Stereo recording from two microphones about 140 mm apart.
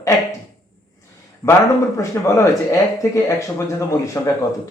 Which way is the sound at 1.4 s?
25° left (ahead or behind).